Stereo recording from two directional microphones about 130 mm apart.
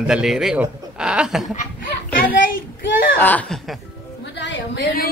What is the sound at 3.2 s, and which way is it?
Speech, 10° left (ahead or behind).